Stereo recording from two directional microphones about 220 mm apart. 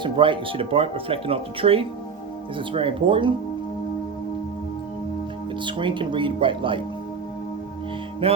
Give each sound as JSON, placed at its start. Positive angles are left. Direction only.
{"t": 0.0, "sound": "speech", "side_deg": -20}
{"t": 5.6, "sound": "speech", "side_deg": -20}